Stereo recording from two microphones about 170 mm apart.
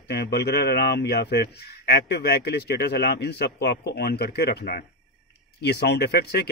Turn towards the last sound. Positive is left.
turn(degrees=70)  # may be behind; listen again after turning